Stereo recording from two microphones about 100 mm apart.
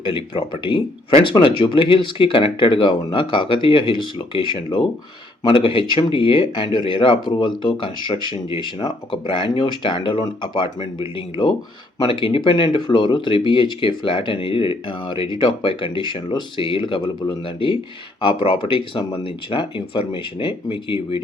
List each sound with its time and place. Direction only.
0.0 s speech: 60° left (ahead or behind)
12.0 s speech: 60° left (ahead or behind)